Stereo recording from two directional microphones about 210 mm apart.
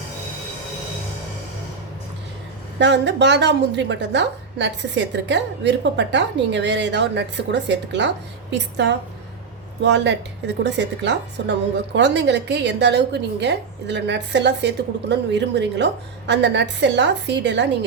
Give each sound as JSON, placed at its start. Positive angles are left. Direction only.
{"t": 2.7, "sound": "a woman's voice", "side_deg": -55}